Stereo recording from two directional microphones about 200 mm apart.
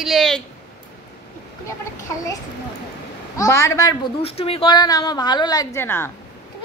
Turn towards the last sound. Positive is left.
turn(degrees=10)  # may be behind; listen again after turning